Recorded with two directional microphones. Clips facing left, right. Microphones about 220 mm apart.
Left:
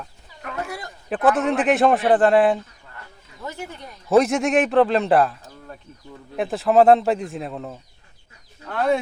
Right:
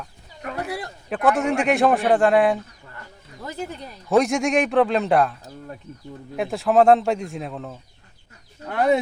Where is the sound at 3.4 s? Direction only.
35° right (ahead or behind).